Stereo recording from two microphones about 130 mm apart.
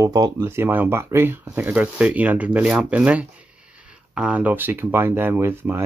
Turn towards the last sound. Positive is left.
turn(degrees=-15)  # may be behind; listen again after turning